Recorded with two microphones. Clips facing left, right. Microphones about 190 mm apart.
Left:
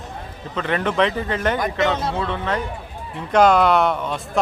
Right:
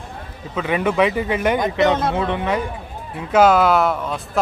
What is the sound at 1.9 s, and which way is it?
Speech, 55° right (ahead or behind).